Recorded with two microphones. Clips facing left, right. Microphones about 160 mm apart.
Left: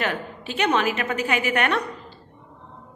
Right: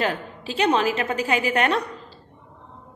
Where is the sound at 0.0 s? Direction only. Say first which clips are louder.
Right 2 dB; 30° right (ahead or behind).